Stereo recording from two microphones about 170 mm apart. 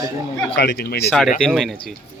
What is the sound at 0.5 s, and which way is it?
Speech, 70° left (ahead or behind).